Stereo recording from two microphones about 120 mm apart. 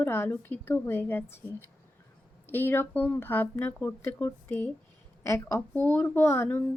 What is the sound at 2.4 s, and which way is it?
Speech, 15° left (ahead or behind).